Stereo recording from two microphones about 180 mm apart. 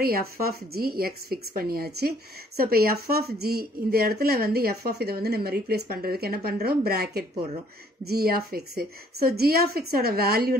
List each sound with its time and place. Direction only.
0.0 s a woman's voice: 55° right (ahead or behind)